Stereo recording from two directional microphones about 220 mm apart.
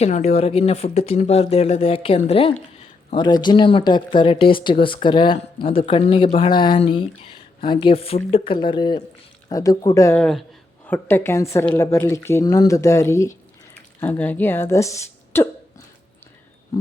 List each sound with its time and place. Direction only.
0.0 s speech: 30° left (ahead or behind); by 15.4 s 10° left (ahead or behind)